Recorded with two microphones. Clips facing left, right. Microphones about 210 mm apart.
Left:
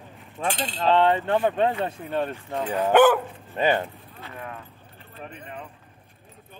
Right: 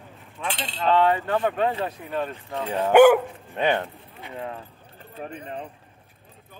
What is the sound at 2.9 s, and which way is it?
Speech, 10° right (ahead or behind).